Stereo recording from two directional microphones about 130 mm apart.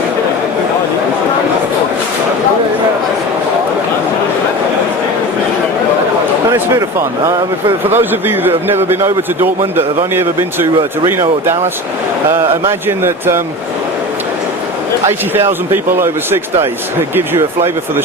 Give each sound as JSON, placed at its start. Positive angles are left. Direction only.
{"t": 7.9, "sound": "a man's voice", "side_deg": -15}
{"t": 15.7, "sound": "a man's voice", "side_deg": -15}